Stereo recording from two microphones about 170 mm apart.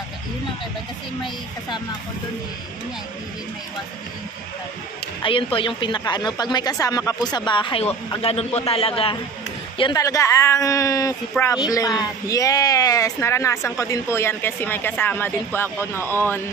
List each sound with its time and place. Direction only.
5.2 s a woman's voice: 30° left (ahead or behind); by 16.3 s 15° left (ahead or behind)